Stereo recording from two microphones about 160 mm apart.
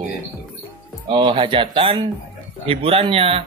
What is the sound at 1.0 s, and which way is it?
Speech, 30° right (ahead or behind).